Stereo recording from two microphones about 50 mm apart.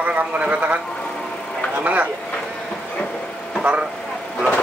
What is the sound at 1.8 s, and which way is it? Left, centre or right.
Speech, right.